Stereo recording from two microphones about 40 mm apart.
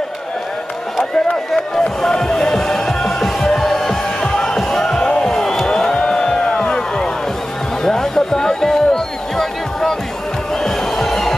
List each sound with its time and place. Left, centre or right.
1.5 s music: centre
4.2 s music: centre